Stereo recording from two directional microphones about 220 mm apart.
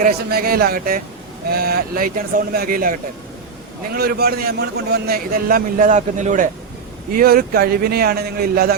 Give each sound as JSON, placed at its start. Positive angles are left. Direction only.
{"t": 0.0, "sound": "a man's voice", "side_deg": -45}